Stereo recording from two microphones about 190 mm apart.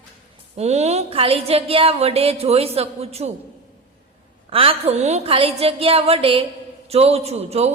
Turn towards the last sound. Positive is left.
turn(degrees=-35)  # may be behind; listen again after turning